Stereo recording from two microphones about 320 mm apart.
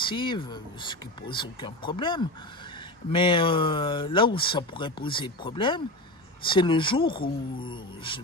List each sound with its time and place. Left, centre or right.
0.0 s speech: centre